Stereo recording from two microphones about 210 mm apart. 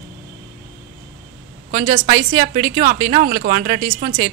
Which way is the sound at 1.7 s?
30° right (ahead or behind).